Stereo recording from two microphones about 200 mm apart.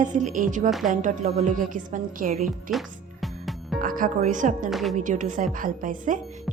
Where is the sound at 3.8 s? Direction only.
45° right (ahead or behind).